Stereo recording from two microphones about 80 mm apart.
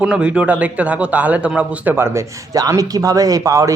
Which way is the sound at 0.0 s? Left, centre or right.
Centre.